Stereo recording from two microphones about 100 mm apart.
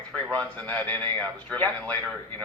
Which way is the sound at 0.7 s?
20° left (ahead or behind).